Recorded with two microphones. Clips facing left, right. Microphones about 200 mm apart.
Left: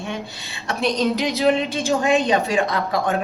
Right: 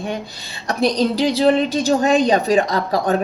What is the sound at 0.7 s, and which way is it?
A woman's voice, 35° right (ahead or behind).